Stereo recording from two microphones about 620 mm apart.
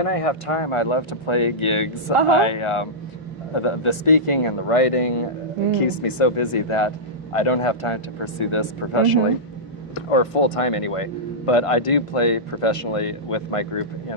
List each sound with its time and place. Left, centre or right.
0.0 s speech: left